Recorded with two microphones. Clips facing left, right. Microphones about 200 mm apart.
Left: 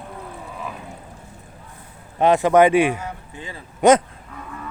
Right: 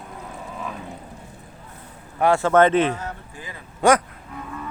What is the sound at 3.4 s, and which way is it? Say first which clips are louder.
Speech: left 6 dB; 25° left (ahead or behind).